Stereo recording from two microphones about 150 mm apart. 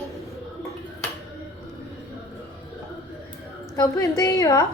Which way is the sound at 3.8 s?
20° left (ahead or behind).